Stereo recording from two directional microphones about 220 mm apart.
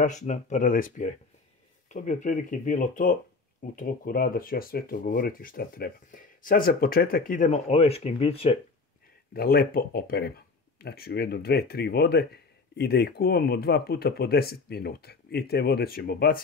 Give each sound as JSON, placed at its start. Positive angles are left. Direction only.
{"t": 0.0, "sound": "speech", "side_deg": 35}
{"t": 9.3, "sound": "speech", "side_deg": 45}